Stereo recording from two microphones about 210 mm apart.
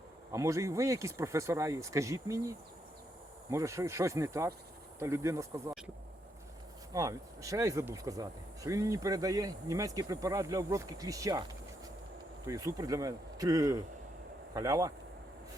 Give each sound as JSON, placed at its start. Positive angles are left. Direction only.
{"t": 0.3, "sound": "speech", "side_deg": -15}
{"t": 6.9, "sound": "speech", "side_deg": -15}
{"t": 12.5, "sound": "speech", "side_deg": -15}